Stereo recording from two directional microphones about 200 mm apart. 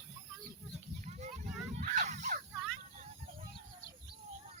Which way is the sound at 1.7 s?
35° right (ahead or behind).